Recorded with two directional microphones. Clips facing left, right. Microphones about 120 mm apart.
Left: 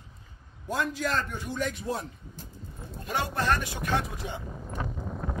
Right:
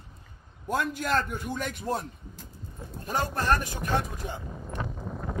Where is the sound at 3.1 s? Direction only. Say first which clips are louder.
Right 1 dB; 40° right (ahead or behind).